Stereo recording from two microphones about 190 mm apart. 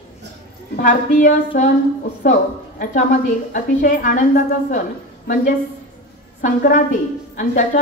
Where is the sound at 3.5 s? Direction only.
45° left (ahead or behind).